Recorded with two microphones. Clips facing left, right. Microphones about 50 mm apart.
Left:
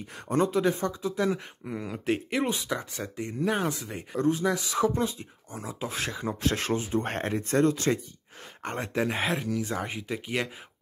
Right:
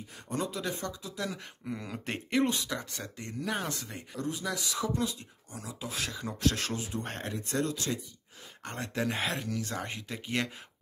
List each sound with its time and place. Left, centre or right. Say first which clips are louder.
0.3 s speech: left 9 dB; left
1.7 s speech: left 7 dB; centre
4.1 s speech: left 9 dB; left
8.6 s speech: left 4 dB; left